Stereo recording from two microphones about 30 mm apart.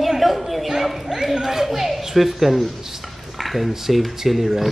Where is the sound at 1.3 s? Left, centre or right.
Centre.